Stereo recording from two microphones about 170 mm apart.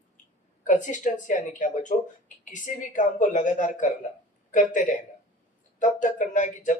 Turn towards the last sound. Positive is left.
turn(degrees=45)  # may be behind; listen again after turning